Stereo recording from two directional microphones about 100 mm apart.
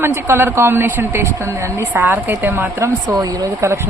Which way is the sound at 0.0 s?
25° right (ahead or behind).